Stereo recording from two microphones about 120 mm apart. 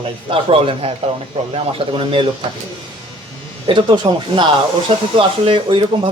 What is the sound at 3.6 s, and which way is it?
Speech, 45° right (ahead or behind).